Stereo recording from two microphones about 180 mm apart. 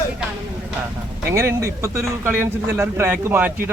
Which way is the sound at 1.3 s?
15° right (ahead or behind).